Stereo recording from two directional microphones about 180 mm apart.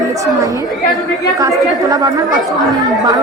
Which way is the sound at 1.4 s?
20° right (ahead or behind).